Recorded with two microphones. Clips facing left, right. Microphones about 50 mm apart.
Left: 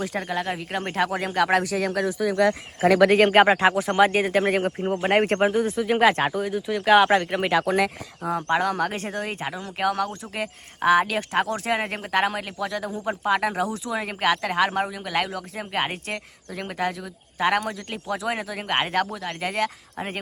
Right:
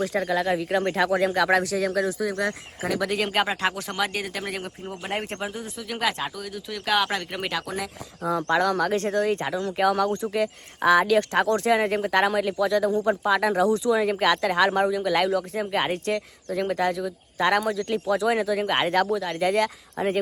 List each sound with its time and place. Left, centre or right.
0.0 s speech: centre
0.3 s speech: left
1.7 s speech: left
2.4 s speech: left
3.3 s speech: left
3.6 s speech: centre
3.9 s speech: left
6.4 s speech: left
7.3 s speech: centre
10.3 s speech: centre
13.6 s speech: centre